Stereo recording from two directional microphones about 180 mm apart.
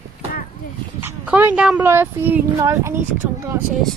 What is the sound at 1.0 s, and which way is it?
Speech, 10° right (ahead or behind).